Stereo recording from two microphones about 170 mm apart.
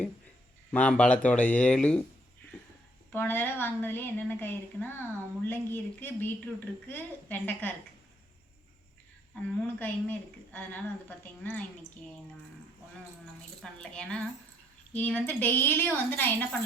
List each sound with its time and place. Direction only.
0.7 s a woman's voice: 10° left (ahead or behind)
3.1 s a woman's voice: 10° left (ahead or behind)
9.3 s a woman's voice: 10° left (ahead or behind)
13.6 s a woman's voice: 5° left (ahead or behind)